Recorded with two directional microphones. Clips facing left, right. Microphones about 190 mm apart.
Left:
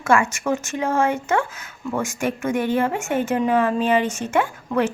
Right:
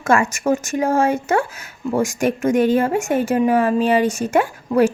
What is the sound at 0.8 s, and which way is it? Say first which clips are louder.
Speech: right 3 dB; 35° right (ahead or behind).